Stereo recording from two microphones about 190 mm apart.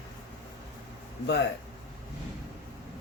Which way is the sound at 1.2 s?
65° left (ahead or behind).